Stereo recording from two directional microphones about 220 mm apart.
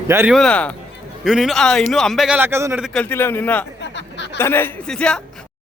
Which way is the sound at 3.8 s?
55° left (ahead or behind).